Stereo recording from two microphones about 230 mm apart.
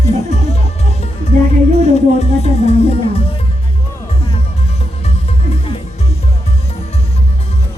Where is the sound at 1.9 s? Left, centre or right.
Left.